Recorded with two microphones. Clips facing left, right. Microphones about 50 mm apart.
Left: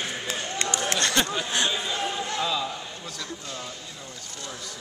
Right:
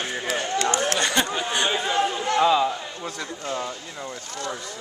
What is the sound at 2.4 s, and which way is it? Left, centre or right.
Speech, right.